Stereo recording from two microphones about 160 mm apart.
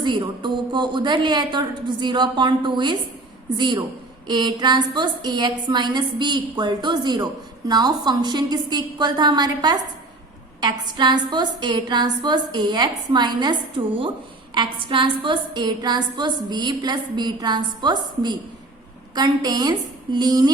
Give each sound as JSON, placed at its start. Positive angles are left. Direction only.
{"t": 0.0, "sound": "a woman's voice", "side_deg": -30}